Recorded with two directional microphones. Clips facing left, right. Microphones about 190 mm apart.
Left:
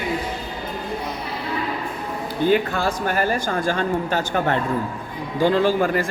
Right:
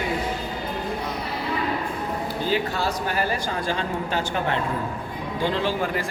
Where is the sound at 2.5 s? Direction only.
50° left (ahead or behind).